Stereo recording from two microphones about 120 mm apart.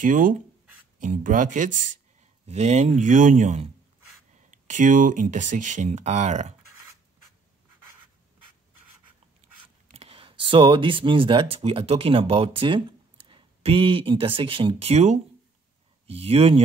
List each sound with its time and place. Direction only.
0.0 s speech: 90° right
2.4 s speech: 65° right (ahead or behind)
9.8 s speech: 55° right (ahead or behind)